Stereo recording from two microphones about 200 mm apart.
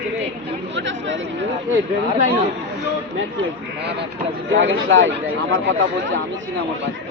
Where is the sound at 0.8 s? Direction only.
65° right (ahead or behind).